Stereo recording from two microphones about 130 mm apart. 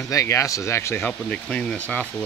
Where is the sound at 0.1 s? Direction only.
25° left (ahead or behind).